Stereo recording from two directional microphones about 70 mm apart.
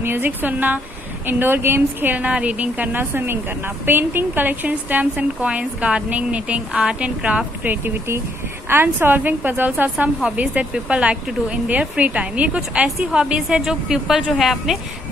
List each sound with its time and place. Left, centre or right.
0.0 s a woman's voice: right; by 14.8 s centre